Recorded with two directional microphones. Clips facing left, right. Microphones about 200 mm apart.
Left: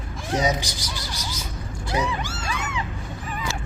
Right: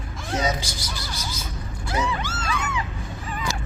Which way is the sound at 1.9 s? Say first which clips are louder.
Even; 15° left (ahead or behind).